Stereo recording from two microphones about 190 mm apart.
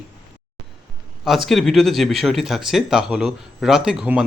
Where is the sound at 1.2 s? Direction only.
Centre (ahead or behind).